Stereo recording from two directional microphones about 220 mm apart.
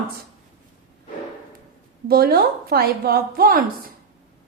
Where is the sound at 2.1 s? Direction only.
45° right (ahead or behind).